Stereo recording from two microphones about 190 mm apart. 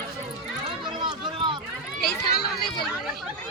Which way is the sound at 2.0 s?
55° left (ahead or behind).